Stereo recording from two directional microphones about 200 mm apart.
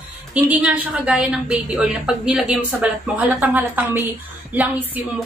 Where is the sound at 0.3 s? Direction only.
5° right (ahead or behind).